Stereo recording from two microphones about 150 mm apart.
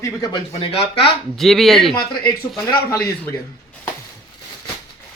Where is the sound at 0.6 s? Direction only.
40° left (ahead or behind).